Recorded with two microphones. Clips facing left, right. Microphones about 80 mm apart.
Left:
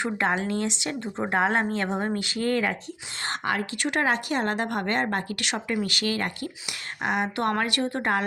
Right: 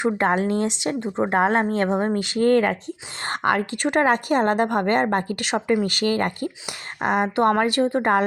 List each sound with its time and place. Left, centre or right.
0.2 s a woman's voice: right
7.3 s a woman's voice: right